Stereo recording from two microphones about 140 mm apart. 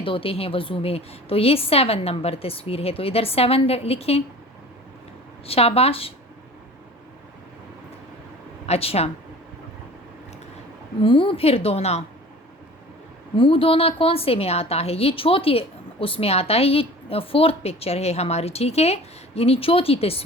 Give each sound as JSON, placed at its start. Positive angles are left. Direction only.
{"t": 0.0, "sound": "a woman's voice", "side_deg": 40}
{"t": 5.5, "sound": "a woman's voice", "side_deg": 45}
{"t": 8.6, "sound": "speech", "side_deg": 45}
{"t": 11.0, "sound": "a woman's voice", "side_deg": 40}
{"t": 13.3, "sound": "a woman's voice", "side_deg": 40}